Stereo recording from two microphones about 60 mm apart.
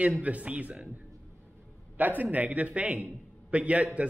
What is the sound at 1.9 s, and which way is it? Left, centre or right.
Speech, right.